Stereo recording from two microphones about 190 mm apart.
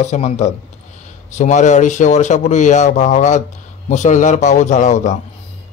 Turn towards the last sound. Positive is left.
turn(degrees=40)  # may be behind; listen again after turning